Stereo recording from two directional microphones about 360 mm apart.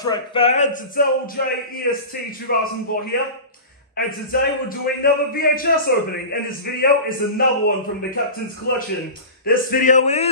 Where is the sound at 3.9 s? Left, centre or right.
Left.